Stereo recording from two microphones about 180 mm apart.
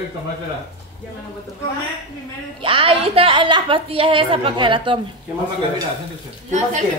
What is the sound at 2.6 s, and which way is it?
A woman's voice, 30° right (ahead or behind).